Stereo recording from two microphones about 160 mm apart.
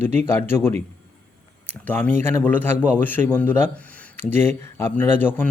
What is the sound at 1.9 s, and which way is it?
Speech, 10° left (ahead or behind).